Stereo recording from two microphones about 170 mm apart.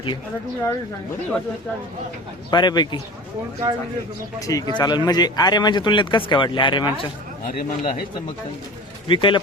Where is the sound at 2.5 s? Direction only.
25° left (ahead or behind).